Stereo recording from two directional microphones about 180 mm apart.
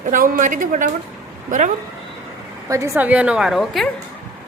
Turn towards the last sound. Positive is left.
turn(degrees=0)  # may be behind; listen again after turning